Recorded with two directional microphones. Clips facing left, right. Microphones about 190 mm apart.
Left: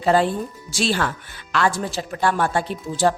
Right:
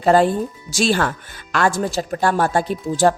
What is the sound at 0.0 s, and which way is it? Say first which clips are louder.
Speech: right 4 dB; 45° right (ahead or behind).